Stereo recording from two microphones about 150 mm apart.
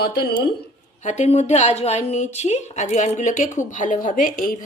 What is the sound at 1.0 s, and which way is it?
A woman's voice, 50° left (ahead or behind).